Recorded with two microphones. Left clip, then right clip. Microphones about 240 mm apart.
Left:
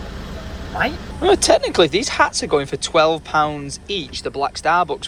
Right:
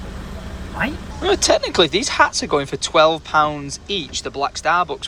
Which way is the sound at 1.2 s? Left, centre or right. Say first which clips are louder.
Left 2 dB; centre.